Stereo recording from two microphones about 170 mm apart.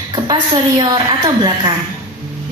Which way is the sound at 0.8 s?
25° right (ahead or behind).